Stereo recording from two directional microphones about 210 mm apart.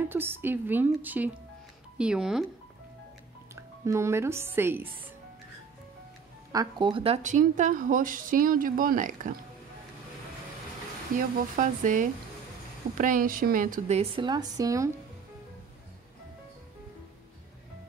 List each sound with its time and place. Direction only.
0.1 s a woman's voice: 10° right (ahead or behind)
3.5 s speech: 15° right (ahead or behind)
6.5 s speech: 20° right (ahead or behind); by 9.3 s 40° right (ahead or behind)
11.1 s speech: 40° right (ahead or behind); by 14.9 s 15° right (ahead or behind)